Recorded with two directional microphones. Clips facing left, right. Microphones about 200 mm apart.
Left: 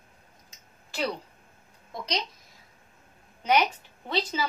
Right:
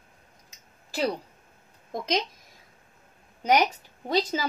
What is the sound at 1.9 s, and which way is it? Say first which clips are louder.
Speech: right 5 dB; 50° right (ahead or behind).